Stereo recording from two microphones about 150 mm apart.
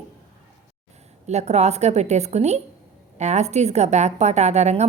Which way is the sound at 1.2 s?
50° right (ahead or behind).